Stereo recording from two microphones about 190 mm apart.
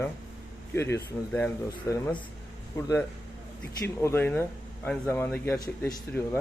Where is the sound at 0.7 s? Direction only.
15° left (ahead or behind).